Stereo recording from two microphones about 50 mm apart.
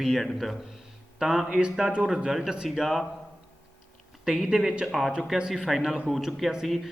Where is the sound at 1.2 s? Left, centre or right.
Centre.